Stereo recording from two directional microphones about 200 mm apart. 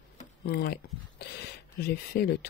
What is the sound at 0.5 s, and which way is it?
Speech, 50° left (ahead or behind).